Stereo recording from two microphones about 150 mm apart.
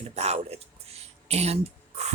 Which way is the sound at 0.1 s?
45° right (ahead or behind).